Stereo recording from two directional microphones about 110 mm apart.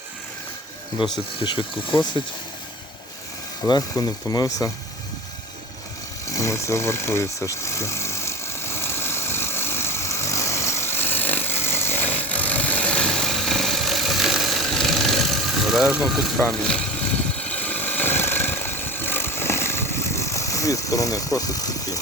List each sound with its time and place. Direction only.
1.1 s speech: 45° left (ahead or behind)
3.7 s speech: 35° left (ahead or behind)
6.3 s vehicle: 25° left (ahead or behind); by 16.2 s 5° right (ahead or behind)
16.5 s speech: 5° left (ahead or behind)
17.5 s vehicle: 15° left (ahead or behind); by 22.0 s 35° left (ahead or behind)